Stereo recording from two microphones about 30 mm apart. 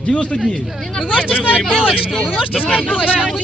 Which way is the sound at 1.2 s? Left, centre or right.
Left.